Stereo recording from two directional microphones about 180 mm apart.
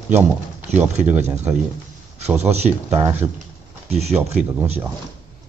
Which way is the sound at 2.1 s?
35° right (ahead or behind).